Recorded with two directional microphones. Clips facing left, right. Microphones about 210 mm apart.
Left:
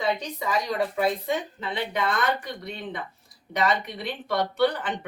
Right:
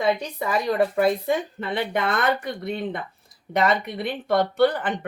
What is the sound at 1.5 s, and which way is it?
Speech, 55° right (ahead or behind).